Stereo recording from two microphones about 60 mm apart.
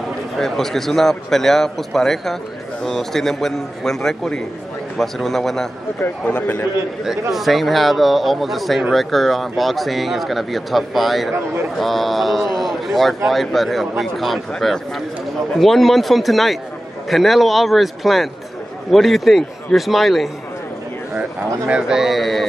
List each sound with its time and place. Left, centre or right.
0.4 s a man's voice: centre
6.2 s a man's voice: left
7.1 s speech: centre
21.6 s speech: centre